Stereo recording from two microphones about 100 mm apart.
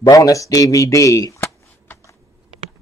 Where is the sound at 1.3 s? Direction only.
25° left (ahead or behind).